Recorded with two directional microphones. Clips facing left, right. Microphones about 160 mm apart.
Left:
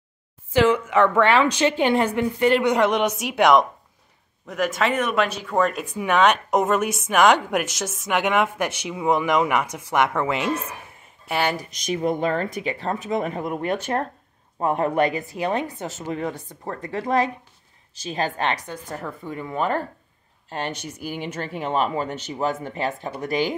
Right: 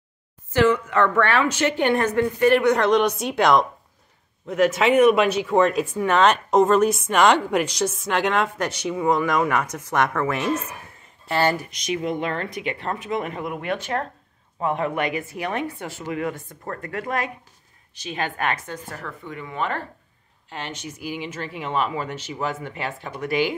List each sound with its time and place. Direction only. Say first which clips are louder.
0.7 s speech: left 2 dB; 10° left (ahead or behind)
4.5 s speech: right 4 dB; 5° right (ahead or behind); by 11.6 s 15° left (ahead or behind)
11.8 s speech: left 4 dB; 45° left (ahead or behind)
15.3 s speech: left 2 dB; 20° left (ahead or behind)
16.4 s speech: left 1 dB; 15° left (ahead or behind)
18.1 s speech: left 2 dB; 35° left (ahead or behind)
18.5 s speech: left 1 dB; 20° left (ahead or behind)
19.2 s speech: left 3 dB; 35° left (ahead or behind)